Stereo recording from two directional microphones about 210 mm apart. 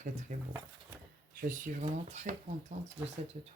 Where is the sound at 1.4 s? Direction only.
40° right (ahead or behind).